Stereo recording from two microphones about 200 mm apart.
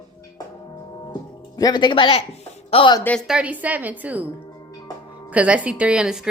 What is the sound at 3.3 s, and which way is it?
Speech, 5° right (ahead or behind).